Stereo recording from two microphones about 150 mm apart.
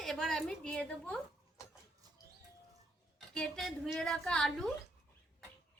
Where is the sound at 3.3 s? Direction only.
5° left (ahead or behind).